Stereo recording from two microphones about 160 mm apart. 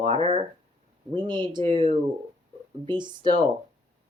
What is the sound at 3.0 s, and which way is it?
Speech, 30° right (ahead or behind).